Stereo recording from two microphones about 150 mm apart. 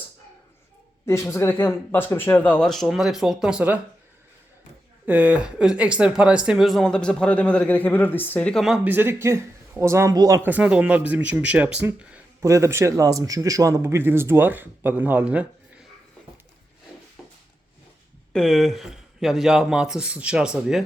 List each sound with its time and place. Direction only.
1.3 s speech: 15° left (ahead or behind); by 3.8 s 10° right (ahead or behind)
5.0 s speech: 10° right (ahead or behind)
12.4 s speech: 20° right (ahead or behind)
17.2 s a sound: centre (ahead or behind)
18.3 s speech: centre (ahead or behind)